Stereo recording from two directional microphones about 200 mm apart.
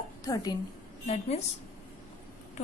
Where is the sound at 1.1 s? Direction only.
35° left (ahead or behind).